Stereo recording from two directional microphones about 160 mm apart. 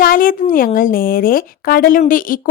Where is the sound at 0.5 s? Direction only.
60° left (ahead or behind).